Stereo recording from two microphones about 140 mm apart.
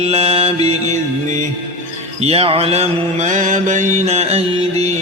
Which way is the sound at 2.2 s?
45° right (ahead or behind).